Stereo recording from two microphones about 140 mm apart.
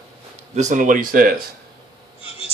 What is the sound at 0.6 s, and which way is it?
Speech, 60° right (ahead or behind).